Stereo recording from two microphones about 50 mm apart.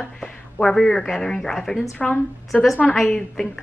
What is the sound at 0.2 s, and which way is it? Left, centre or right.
Speech, centre.